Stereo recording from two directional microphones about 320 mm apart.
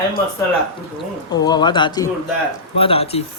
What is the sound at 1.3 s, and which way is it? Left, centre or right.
Speech, centre.